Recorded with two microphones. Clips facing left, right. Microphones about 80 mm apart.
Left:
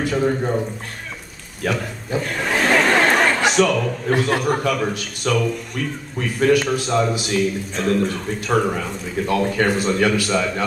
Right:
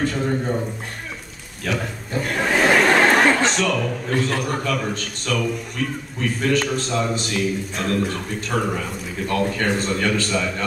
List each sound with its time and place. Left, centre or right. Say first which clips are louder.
0.0 s speech: left 3 dB; centre
1.7 s a sound: left 2 dB; centre
4.1 s a man's voice: left 4 dB; centre
4.5 s a man's voice: left 4 dB; centre